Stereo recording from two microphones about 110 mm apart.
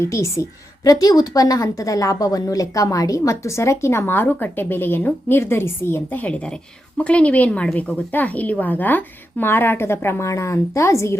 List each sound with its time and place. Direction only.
0.0 s a woman's voice: 25° left (ahead or behind)